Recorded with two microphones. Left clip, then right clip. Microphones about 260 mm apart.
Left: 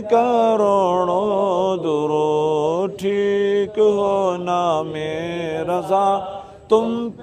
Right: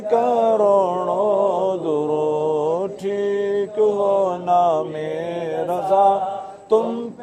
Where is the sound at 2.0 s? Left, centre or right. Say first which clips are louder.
Left 4 dB; left.